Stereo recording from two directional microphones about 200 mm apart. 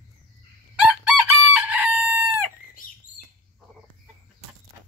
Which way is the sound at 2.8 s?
45° left (ahead or behind).